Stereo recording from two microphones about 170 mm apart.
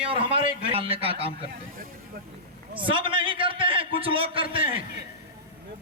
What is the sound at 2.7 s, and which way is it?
A man's voice, 30° right (ahead or behind).